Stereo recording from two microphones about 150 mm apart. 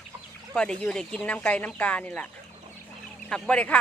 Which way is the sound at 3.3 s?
5° left (ahead or behind).